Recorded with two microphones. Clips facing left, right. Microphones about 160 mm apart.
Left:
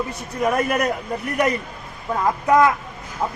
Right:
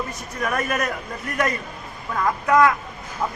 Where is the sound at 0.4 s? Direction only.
20° left (ahead or behind).